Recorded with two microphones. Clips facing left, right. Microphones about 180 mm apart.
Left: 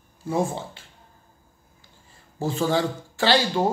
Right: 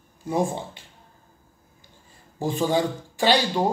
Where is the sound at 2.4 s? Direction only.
15° right (ahead or behind).